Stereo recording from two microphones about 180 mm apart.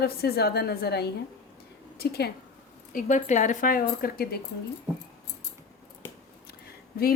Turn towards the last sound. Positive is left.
turn(degrees=55)  # may be behind; listen again after turning